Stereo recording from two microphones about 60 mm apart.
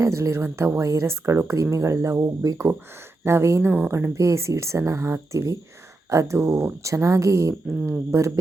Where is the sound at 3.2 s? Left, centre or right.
Right.